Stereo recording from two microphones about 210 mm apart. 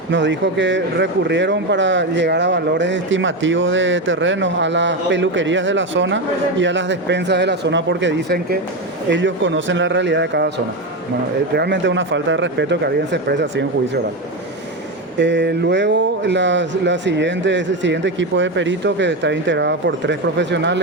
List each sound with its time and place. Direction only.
0.1 s speech: 60° right (ahead or behind)
11.5 s speech: 55° right (ahead or behind)
15.2 s speech: 55° right (ahead or behind)